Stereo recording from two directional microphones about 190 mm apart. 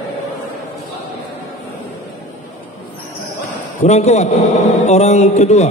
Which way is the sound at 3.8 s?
35° left (ahead or behind).